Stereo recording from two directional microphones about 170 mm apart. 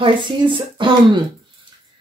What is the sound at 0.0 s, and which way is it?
A woman's voice, 30° right (ahead or behind).